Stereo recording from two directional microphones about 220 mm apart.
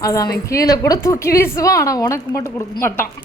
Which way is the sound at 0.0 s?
15° left (ahead or behind).